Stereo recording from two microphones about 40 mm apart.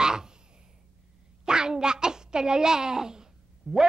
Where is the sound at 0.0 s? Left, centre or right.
Centre.